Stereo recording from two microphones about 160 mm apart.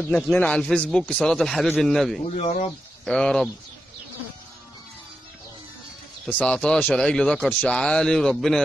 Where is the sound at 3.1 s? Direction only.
5° left (ahead or behind).